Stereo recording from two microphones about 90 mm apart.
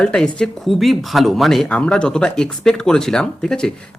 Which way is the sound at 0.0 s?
10° left (ahead or behind).